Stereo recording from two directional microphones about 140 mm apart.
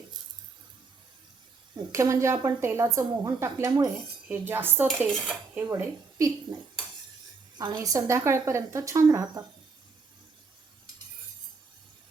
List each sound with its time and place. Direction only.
1.9 s a woman's voice: 20° right (ahead or behind)
5.1 s cutlery: centre (ahead or behind)
5.5 s a woman's voice: 20° right (ahead or behind)
7.6 s a woman's voice: 25° right (ahead or behind)